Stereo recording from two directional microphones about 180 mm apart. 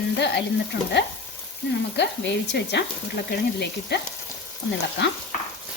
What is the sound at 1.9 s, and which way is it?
Frying, 75° left (ahead or behind).